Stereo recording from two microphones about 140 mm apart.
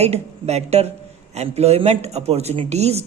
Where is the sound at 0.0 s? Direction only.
50° right (ahead or behind).